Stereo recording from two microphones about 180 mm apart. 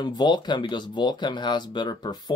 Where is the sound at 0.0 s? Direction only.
25° left (ahead or behind).